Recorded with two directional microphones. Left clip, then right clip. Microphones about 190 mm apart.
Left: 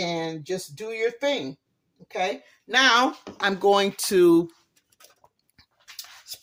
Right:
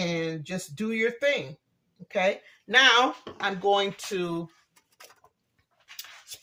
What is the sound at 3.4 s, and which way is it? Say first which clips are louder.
Speech: left 4 dB; 85° left.